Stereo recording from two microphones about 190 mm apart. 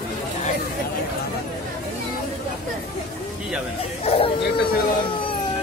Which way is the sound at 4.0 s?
35° left (ahead or behind).